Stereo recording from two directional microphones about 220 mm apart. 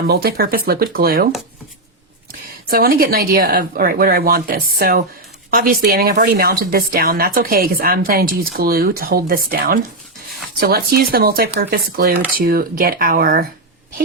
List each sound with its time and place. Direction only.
0.1 s speech: 45° right (ahead or behind)
2.6 s speech: 40° right (ahead or behind)